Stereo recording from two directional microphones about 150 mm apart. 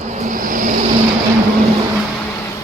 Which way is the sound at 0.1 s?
55° right (ahead or behind).